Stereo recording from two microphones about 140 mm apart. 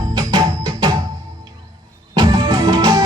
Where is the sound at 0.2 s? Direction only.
30° right (ahead or behind).